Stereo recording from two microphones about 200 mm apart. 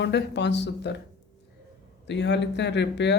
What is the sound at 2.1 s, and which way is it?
A man's voice, 60° left (ahead or behind).